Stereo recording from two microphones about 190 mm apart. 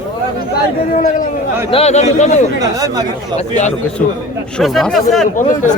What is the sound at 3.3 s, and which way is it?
Speech, 40° left (ahead or behind).